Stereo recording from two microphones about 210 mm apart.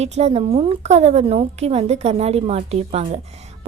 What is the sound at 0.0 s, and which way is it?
A woman's voice, 30° right (ahead or behind).